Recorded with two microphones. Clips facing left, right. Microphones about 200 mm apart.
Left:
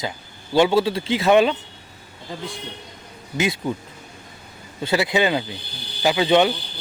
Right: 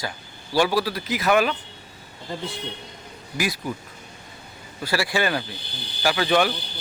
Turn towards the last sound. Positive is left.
turn(degrees=20)  # may be behind; listen again after turning